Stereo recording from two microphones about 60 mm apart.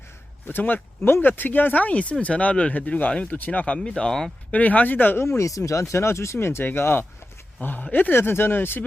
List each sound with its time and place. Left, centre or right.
0.4 s speech: left
3.8 s speech: centre
4.5 s speech: left
5.4 s speech: left
5.9 s speech: left